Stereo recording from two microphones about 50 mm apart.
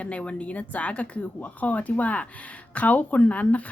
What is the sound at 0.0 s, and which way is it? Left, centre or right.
Speech, left.